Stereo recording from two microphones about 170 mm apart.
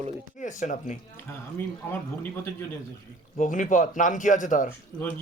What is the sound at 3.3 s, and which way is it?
Speech, 50° left (ahead or behind).